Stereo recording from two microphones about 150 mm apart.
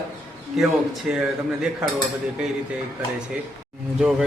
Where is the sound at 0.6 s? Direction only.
Centre (ahead or behind).